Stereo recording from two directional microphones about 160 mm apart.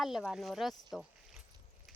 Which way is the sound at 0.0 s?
Centre (ahead or behind).